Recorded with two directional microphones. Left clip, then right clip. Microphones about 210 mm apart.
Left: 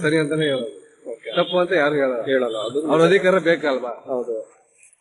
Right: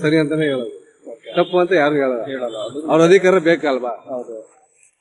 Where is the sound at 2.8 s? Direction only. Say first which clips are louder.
Right 4 dB; 45° right (ahead or behind).